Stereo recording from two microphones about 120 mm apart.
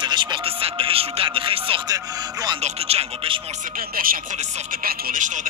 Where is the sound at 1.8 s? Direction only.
30° right (ahead or behind).